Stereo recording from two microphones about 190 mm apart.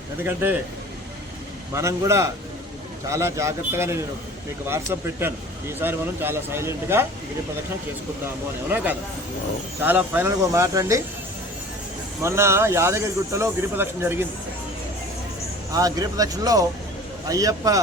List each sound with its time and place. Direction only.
0.2 s speech: 10° right (ahead or behind)
1.7 s speech: 15° right (ahead or behind)
8.7 s speech: 10° right (ahead or behind)
12.2 s speech: 15° right (ahead or behind)
15.7 s speech: 20° right (ahead or behind)